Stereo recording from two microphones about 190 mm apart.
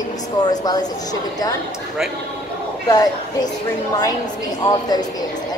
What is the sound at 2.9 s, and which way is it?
Speech, 20° left (ahead or behind).